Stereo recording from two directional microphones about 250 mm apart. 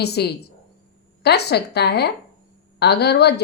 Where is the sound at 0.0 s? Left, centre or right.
Left.